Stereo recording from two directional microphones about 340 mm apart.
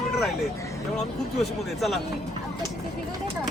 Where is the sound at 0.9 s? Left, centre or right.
Centre.